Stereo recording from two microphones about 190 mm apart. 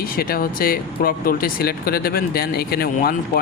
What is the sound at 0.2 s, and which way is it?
Speech, 50° left (ahead or behind).